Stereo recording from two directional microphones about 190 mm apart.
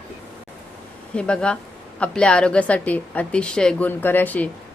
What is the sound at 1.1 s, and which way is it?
A woman's voice, 5° left (ahead or behind).